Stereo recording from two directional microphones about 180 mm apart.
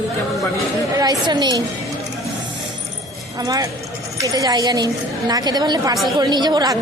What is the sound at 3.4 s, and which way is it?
A woman's voice, 20° right (ahead or behind).